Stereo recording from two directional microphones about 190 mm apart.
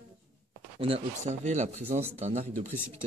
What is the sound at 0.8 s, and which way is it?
Speech, 30° right (ahead or behind).